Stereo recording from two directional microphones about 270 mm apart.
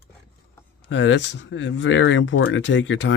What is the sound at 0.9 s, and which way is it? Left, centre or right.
Speech, left.